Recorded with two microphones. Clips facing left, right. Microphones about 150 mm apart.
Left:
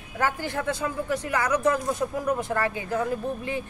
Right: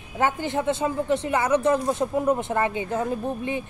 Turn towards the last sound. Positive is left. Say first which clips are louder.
# right 2 dB
turn(degrees=-20)  # may be behind; listen again after turning